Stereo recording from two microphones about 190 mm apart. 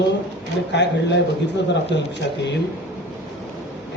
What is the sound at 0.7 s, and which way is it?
A man's voice, 65° left (ahead or behind).